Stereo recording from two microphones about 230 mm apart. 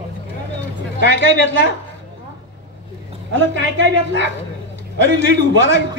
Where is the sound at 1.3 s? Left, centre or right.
Right.